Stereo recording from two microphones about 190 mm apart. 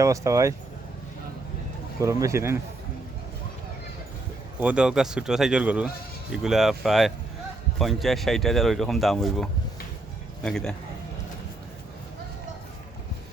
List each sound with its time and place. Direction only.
0.0 s speech: 15° right (ahead or behind)
2.0 s speech: 15° right (ahead or behind)
4.6 s speech: 5° right (ahead or behind)